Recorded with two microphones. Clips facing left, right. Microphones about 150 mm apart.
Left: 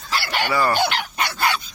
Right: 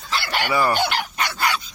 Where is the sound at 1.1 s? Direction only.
25° left (ahead or behind).